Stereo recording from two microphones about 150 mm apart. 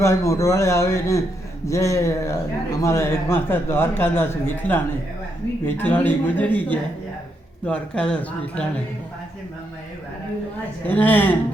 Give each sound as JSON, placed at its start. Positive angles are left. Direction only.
{"t": 0.0, "sound": "a man's voice", "side_deg": 20}
{"t": 10.8, "sound": "a man's voice", "side_deg": 10}